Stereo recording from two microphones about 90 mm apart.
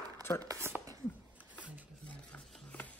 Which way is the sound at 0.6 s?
25° right (ahead or behind).